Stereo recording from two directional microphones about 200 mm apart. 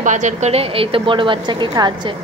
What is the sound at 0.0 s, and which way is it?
A woman's voice, 40° right (ahead or behind).